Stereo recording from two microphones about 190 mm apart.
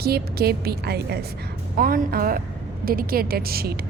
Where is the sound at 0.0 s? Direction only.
55° right (ahead or behind).